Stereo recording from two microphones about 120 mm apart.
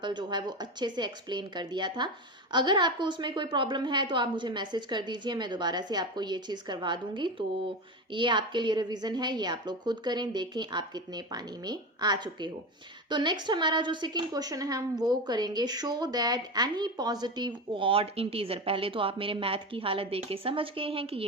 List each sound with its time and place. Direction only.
0.0 s a woman's voice: 40° right (ahead or behind)